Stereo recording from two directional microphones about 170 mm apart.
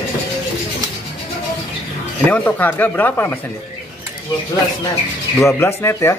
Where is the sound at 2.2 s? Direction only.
10° left (ahead or behind).